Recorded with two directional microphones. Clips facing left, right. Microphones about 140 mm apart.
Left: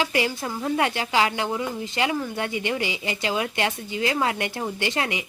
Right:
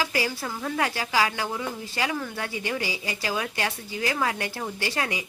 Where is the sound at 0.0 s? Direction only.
25° left (ahead or behind).